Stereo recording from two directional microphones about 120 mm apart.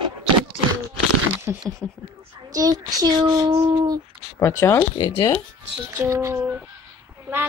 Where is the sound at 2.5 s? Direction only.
30° right (ahead or behind).